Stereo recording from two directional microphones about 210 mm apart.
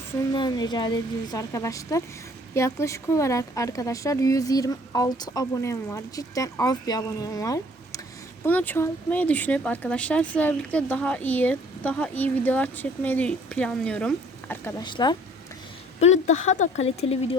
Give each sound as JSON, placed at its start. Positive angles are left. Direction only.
{"t": 0.3, "sound": "speech", "side_deg": 20}
{"t": 16.0, "sound": "speech", "side_deg": 35}